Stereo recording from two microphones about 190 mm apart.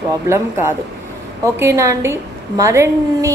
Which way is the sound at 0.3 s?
15° right (ahead or behind).